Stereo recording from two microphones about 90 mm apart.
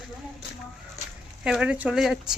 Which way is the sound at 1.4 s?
10° right (ahead or behind).